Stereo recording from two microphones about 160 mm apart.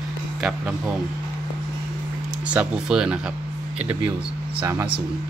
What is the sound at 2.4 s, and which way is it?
Speech, 5° right (ahead or behind).